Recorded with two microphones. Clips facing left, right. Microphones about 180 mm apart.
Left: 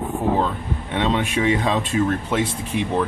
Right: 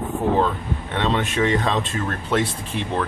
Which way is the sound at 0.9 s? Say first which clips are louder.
Left 2 dB; 10° left (ahead or behind).